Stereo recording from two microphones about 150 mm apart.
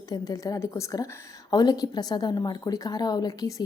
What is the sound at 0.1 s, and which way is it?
A woman's voice, 25° left (ahead or behind).